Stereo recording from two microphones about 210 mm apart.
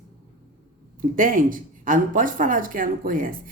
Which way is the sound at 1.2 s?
40° right (ahead or behind).